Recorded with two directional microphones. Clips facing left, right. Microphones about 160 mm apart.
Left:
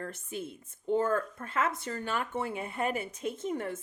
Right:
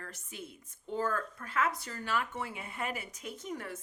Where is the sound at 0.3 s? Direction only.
50° left (ahead or behind).